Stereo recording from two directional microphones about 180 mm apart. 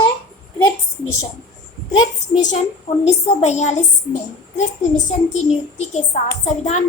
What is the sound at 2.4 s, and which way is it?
A woman's voice, 40° left (ahead or behind).